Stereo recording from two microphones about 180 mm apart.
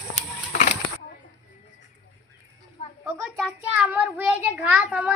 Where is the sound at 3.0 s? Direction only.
5° right (ahead or behind).